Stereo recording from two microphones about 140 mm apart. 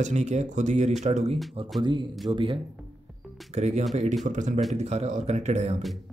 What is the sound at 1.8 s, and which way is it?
Speech, 35° right (ahead or behind).